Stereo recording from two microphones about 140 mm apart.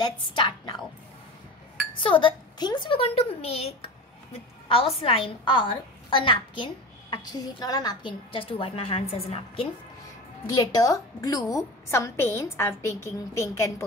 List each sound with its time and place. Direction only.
0.0 s a woman's voice: 30° left (ahead or behind)
2.0 s a woman's voice: 35° left (ahead or behind)
10.5 s a woman's voice: 25° left (ahead or behind)